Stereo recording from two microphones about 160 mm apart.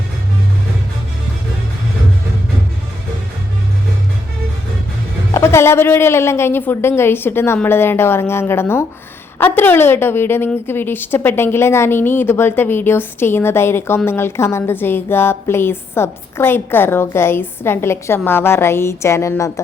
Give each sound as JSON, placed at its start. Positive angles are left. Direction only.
{"t": 5.3, "sound": "a woman's voice", "side_deg": 15}